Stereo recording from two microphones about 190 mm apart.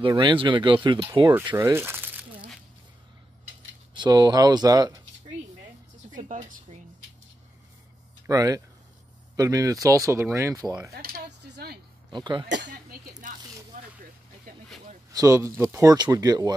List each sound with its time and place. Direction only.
0.0 s speech: 25° right (ahead or behind)
3.9 s speech: 20° right (ahead or behind)
6.1 s speech: 45° right (ahead or behind)
8.3 s speech: 20° right (ahead or behind)
10.9 s a sound: 55° right (ahead or behind)
12.1 s speech: 25° right (ahead or behind)
12.4 s speech: 65° right (ahead or behind)
13.1 s a sound: 45° right (ahead or behind)
15.1 s speech: 15° right (ahead or behind)